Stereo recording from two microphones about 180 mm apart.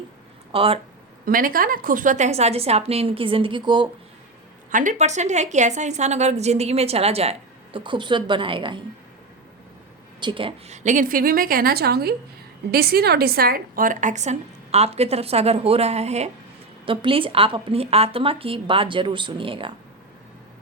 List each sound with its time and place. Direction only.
0.5 s a woman's voice: 30° right (ahead or behind)
1.2 s a woman's voice: 50° right (ahead or behind); by 3.8 s 25° right (ahead or behind)
4.7 s a woman's voice: 45° right (ahead or behind); by 8.8 s 25° right (ahead or behind)
10.2 s a woman's voice: 25° right (ahead or behind)
10.8 s a woman's voice: 50° right (ahead or behind); by 19.7 s 30° right (ahead or behind)